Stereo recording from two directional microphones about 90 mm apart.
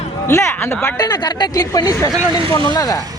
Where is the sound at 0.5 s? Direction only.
25° left (ahead or behind).